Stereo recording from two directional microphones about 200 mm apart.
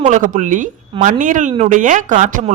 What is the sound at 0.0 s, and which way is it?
A woman's voice, 40° right (ahead or behind).